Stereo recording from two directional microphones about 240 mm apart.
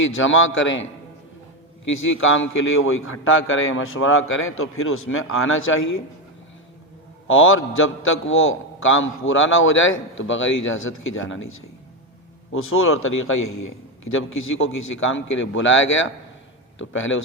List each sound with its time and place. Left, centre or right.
0.2 s a man's voice: left
1.9 s a man's voice: left
7.3 s a man's voice: left